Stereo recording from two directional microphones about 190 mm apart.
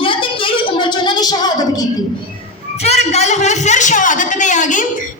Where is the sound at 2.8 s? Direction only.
35° left (ahead or behind).